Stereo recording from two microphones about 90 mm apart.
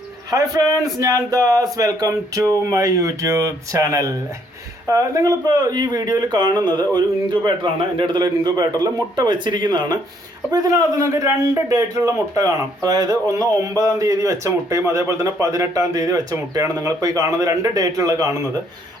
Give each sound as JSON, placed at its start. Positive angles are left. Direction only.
{"t": 0.3, "sound": "a man's voice", "side_deg": -45}
{"t": 10.5, "sound": "a man's voice", "side_deg": -40}